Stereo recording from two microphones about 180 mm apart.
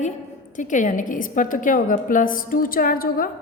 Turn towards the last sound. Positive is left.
turn(degrees=55)  # may be behind; listen again after turning